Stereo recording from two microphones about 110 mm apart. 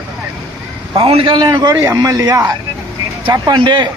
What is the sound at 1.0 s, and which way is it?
Speech, 55° right (ahead or behind).